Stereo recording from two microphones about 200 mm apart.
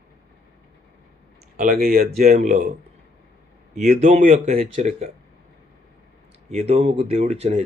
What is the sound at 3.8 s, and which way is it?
Speech, 35° right (ahead or behind).